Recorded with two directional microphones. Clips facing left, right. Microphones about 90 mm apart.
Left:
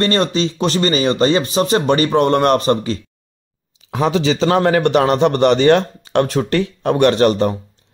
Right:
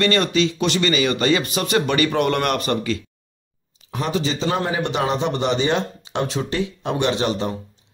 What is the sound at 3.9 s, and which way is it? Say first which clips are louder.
A man's voice: left 7 dB; 90° left.